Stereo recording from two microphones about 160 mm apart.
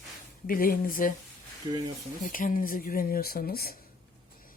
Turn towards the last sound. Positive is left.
turn(degrees=70)  # may be behind; listen again after turning